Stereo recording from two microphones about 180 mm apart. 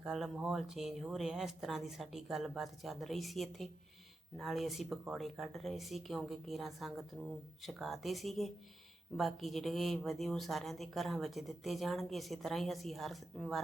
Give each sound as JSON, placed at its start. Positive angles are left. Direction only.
{"t": 0.0, "sound": "speech", "side_deg": -5}